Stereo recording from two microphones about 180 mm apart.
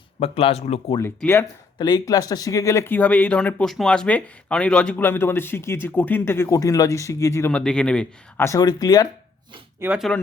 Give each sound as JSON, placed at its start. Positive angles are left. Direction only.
{"t": 0.2, "sound": "speech", "side_deg": 35}
{"t": 1.2, "sound": "speech", "side_deg": 10}
{"t": 8.4, "sound": "speech", "side_deg": 20}
{"t": 9.8, "sound": "speech", "side_deg": -5}